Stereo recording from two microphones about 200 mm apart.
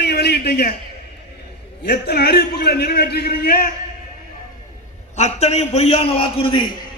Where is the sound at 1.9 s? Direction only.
50° left (ahead or behind).